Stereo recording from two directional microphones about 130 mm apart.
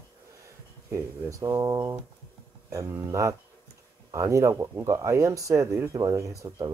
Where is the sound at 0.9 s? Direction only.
25° right (ahead or behind).